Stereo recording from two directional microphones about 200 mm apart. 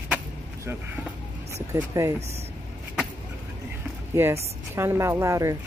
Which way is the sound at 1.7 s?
15° right (ahead or behind).